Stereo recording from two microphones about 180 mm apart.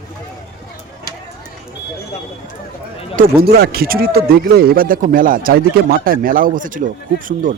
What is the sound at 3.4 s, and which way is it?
Speech, 60° right (ahead or behind).